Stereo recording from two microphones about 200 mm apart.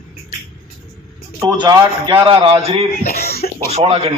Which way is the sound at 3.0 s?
50° left (ahead or behind).